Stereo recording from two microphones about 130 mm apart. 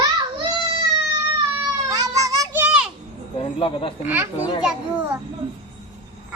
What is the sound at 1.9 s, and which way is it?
Child singing, 25° right (ahead or behind).